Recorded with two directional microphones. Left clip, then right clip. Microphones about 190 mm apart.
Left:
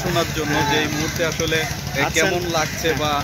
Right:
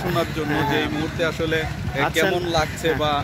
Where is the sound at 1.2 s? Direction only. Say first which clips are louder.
Left 1 dB; 60° right (ahead or behind).